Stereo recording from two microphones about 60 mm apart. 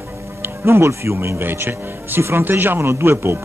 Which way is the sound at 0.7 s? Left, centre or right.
Right.